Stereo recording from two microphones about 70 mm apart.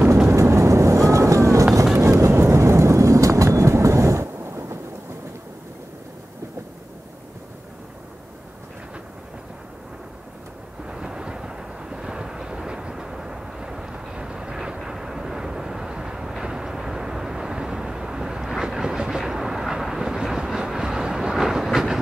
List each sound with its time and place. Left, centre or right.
0.4 s vehicle: right
2.0 s train: right
10.9 s vehicle: centre